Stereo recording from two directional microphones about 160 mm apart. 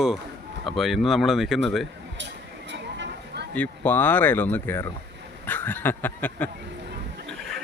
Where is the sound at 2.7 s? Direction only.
90° right.